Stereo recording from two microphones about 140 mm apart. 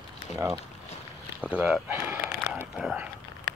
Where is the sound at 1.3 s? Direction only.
5° right (ahead or behind).